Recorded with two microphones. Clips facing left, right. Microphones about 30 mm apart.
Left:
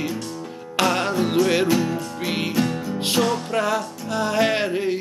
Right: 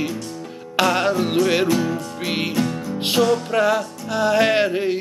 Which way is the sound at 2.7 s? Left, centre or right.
Centre.